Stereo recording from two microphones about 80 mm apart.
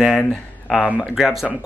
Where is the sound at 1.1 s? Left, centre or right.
Centre.